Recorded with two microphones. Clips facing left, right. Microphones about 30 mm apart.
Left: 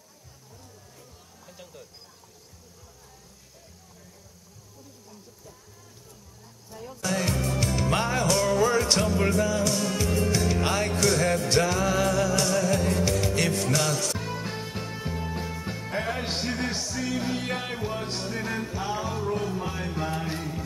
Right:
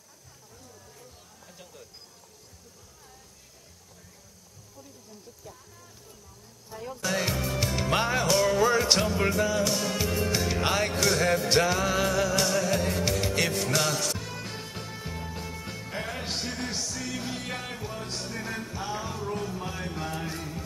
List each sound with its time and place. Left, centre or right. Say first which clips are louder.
6.7 s music: even; centre
14.1 s music: left 4 dB; centre